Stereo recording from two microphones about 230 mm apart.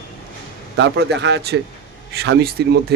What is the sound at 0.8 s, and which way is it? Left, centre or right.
Speech, right.